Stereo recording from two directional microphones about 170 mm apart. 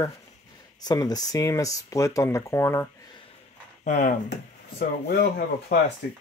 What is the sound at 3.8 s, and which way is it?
Speech, 50° left (ahead or behind).